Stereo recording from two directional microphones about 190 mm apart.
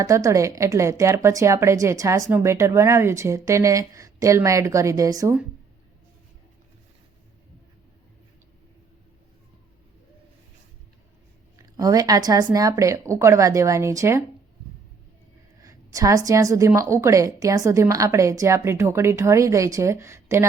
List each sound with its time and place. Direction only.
0.0 s a woman's voice: 15° right (ahead or behind)
11.5 s a woman's voice: 15° right (ahead or behind)
15.6 s a woman's voice: 15° right (ahead or behind)